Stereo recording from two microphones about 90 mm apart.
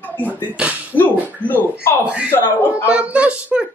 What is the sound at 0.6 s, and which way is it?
Speech, 15° right (ahead or behind).